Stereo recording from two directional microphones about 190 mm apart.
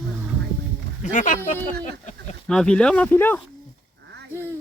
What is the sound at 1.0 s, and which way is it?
Speech, 40° left (ahead or behind).